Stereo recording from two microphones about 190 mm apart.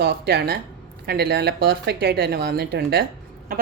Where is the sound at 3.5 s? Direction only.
50° right (ahead or behind).